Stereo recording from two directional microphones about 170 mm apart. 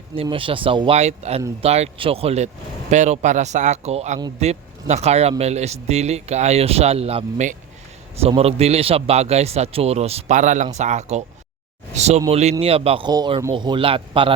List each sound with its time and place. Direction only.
0.2 s a man's voice: 30° right (ahead or behind)